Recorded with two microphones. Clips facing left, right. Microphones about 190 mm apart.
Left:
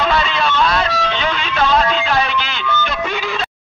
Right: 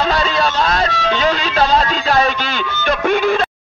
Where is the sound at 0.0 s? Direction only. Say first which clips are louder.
Right 1 dB; 40° right (ahead or behind).